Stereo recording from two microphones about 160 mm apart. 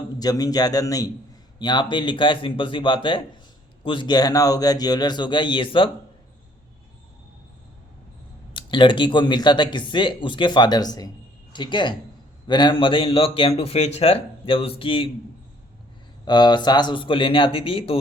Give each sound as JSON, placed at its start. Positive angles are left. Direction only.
{"t": 0.2, "sound": "speech", "side_deg": 25}
{"t": 8.5, "sound": "speech", "side_deg": 30}
{"t": 16.2, "sound": "speech", "side_deg": 25}